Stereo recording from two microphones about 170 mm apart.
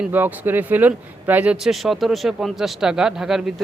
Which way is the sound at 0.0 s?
10° right (ahead or behind).